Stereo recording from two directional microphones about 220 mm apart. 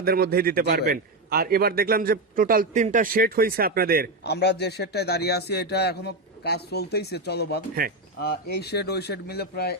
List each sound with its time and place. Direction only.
0.0 s a man's voice: 45° right (ahead or behind)
4.2 s a man's voice: 50° left (ahead or behind)
7.8 s speech: 40° right (ahead or behind)
8.2 s a man's voice: 45° left (ahead or behind)